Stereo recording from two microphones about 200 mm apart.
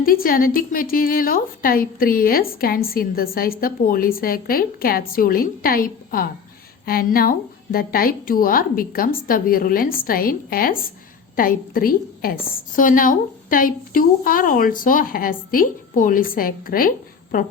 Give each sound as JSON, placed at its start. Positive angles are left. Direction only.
{"t": 0.0, "sound": "a woman's voice", "side_deg": 45}